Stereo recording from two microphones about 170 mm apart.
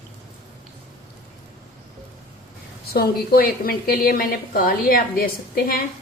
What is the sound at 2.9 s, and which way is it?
A woman's voice, 60° left (ahead or behind).